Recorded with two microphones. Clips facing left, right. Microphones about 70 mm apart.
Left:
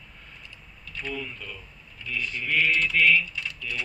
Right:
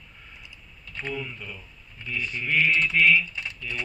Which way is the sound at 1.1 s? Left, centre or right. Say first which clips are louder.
Right 1 dB; centre.